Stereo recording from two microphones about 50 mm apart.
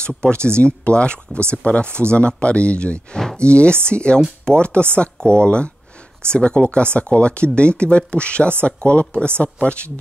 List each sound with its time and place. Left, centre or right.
0.2 s speech: centre